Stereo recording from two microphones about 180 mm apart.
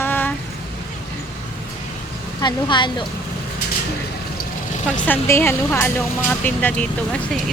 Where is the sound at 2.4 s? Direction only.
25° left (ahead or behind).